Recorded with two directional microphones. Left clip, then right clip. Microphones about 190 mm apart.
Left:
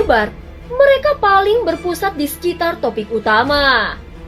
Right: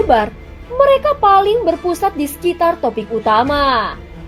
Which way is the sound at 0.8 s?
30° right (ahead or behind).